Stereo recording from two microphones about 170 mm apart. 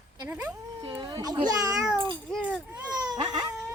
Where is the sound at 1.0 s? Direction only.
20° right (ahead or behind).